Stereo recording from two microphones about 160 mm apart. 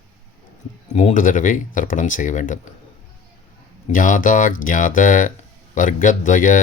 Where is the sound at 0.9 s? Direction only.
50° left (ahead or behind).